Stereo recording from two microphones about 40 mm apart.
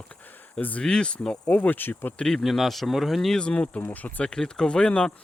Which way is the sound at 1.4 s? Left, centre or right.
Left.